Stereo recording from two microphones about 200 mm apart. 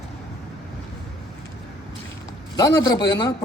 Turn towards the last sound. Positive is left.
turn(degrees=20)  # may be behind; listen again after turning